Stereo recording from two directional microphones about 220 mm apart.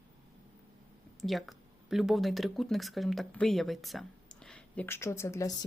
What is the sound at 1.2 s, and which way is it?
Speech, centre (ahead or behind).